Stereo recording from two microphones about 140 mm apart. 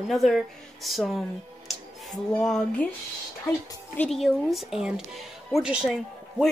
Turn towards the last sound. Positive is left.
turn(degrees=-5)  # may be behind; listen again after turning